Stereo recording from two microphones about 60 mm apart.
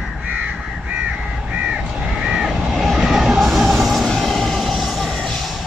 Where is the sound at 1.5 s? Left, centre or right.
Centre.